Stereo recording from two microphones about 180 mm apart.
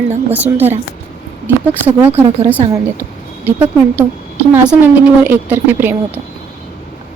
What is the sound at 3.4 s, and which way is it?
A woman's voice, 10° right (ahead or behind).